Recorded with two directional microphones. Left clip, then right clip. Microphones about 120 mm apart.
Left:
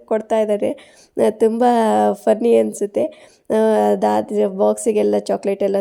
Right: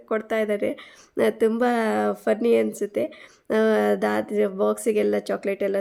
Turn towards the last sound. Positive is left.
turn(degrees=35)  # may be behind; listen again after turning